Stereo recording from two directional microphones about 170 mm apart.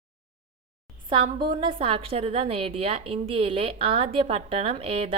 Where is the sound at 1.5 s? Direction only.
30° right (ahead or behind).